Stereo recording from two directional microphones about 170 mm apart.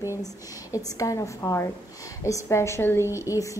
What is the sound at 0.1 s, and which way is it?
A woman's voice, 20° left (ahead or behind).